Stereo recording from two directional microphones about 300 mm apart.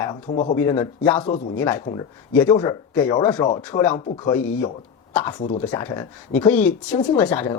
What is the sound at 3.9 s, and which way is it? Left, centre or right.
Speech, left.